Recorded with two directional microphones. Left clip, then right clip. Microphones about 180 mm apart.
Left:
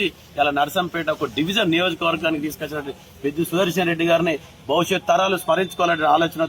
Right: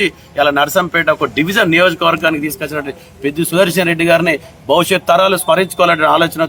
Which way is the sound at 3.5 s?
20° right (ahead or behind).